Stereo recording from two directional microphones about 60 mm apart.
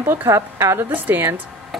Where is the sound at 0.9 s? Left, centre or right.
Right.